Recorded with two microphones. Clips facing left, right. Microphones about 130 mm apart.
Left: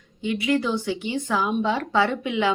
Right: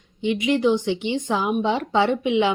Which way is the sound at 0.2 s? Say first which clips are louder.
Right 3 dB; 20° right (ahead or behind).